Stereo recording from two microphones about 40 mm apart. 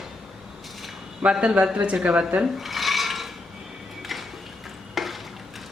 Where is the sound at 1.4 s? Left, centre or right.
Right.